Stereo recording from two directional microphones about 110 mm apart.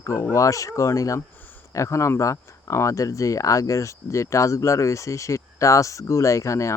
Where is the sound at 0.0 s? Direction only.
25° left (ahead or behind).